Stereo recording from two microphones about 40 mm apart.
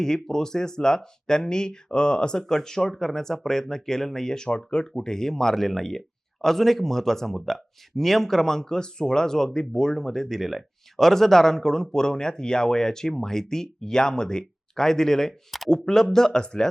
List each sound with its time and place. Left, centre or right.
0.0 s speech: centre
4.4 s speech: left
15.3 s speech: centre
15.7 s speech: centre